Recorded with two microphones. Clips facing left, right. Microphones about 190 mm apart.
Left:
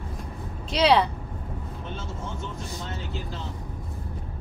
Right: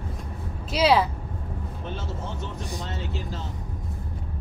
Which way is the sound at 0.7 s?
5° right (ahead or behind).